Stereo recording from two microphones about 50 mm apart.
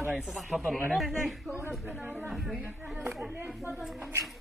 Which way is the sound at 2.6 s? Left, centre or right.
Right.